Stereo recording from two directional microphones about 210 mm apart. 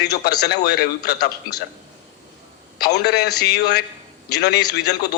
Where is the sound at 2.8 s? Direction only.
50° left (ahead or behind).